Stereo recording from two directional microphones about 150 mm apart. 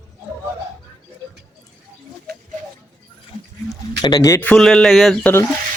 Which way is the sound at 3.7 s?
25° left (ahead or behind).